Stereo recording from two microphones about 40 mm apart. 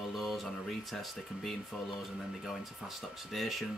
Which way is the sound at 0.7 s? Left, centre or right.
Centre.